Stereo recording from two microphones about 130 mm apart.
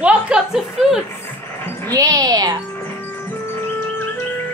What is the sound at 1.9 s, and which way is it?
Speech, 25° right (ahead or behind).